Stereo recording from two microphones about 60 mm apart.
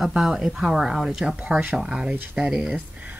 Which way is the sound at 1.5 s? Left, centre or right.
Right.